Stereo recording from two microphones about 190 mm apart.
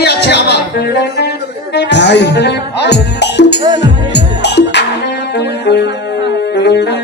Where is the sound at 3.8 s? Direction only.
65° left (ahead or behind).